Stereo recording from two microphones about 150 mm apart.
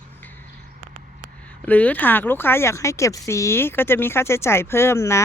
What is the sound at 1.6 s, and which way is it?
Speech, 10° left (ahead or behind).